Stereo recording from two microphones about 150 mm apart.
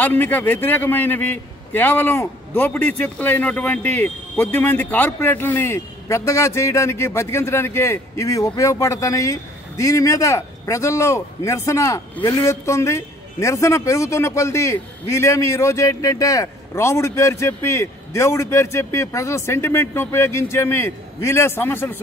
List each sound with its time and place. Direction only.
0.0 s a man's voice: 15° left (ahead or behind)